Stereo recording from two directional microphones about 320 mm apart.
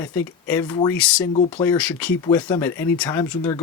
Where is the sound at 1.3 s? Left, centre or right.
Centre.